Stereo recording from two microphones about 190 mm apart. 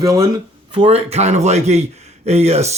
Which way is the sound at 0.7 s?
30° right (ahead or behind).